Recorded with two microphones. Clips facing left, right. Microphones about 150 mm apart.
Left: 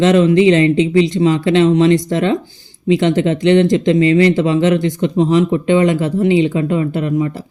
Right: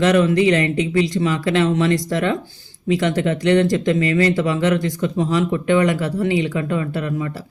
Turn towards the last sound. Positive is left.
turn(degrees=25)  # may be behind; listen again after turning